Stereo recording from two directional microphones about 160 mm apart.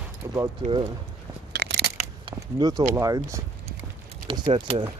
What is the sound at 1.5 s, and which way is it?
Crunch, 90° right.